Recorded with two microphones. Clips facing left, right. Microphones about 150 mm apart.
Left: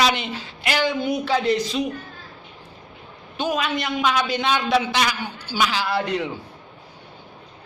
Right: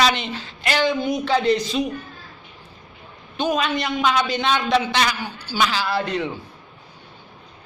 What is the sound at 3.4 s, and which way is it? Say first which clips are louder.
A man's voice: right 2 dB; 5° left (ahead or behind).